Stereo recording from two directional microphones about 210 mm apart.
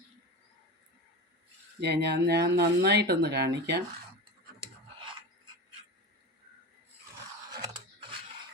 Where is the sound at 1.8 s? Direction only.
50° right (ahead or behind).